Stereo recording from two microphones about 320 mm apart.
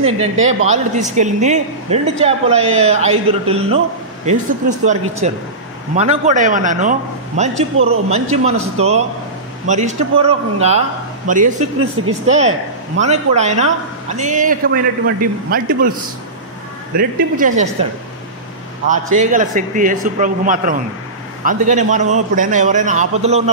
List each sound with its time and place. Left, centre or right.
0.0 s a woman's voice: right
16.9 s a woman's voice: right
18.9 s a woman's voice: right